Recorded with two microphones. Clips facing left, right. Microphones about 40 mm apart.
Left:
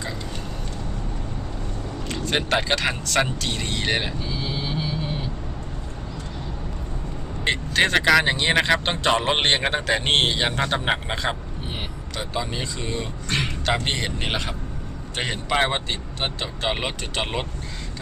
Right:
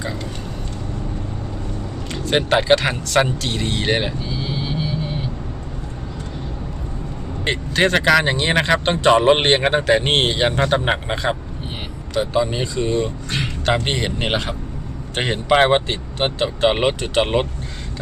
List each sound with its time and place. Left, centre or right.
2.0 s speech: centre
4.5 s vehicle: centre
7.4 s speech: centre
14.2 s speech: right